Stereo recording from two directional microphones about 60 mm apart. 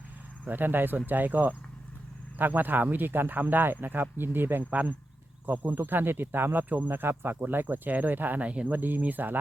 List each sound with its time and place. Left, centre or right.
0.4 s speech: right